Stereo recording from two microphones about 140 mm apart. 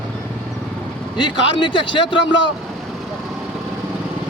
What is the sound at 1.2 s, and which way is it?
A man's voice, 35° left (ahead or behind).